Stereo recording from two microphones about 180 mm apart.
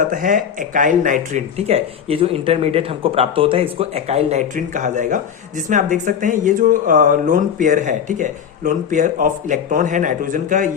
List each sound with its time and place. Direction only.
0.1 s speech: 50° right (ahead or behind)